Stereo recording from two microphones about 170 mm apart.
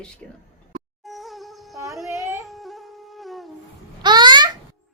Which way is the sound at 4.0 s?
25° right (ahead or behind).